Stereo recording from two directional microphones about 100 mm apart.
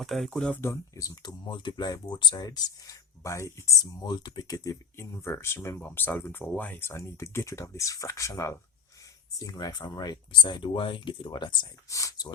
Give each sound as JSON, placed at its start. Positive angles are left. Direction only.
{"t": 0.0, "sound": "speech", "side_deg": 0}
{"t": 0.5, "sound": "speech", "side_deg": 25}
{"t": 1.5, "sound": "speech", "side_deg": 50}
{"t": 3.2, "sound": "speech", "side_deg": 30}
{"t": 4.0, "sound": "speech", "side_deg": 45}
{"t": 11.9, "sound": "speech", "side_deg": 35}